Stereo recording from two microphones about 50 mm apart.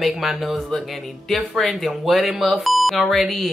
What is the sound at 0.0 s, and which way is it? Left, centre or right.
Speech, centre.